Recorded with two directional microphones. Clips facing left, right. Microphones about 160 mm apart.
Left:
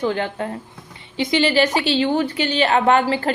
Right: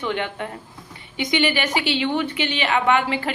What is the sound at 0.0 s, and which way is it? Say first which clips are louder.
A woman's voice: left 4 dB; 35° left (ahead or behind).